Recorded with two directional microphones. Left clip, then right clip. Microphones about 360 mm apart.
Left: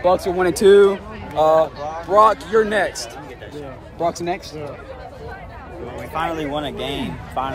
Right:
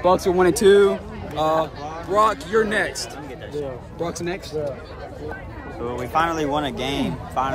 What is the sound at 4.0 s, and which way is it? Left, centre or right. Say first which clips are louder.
Speech: left 6 dB; centre.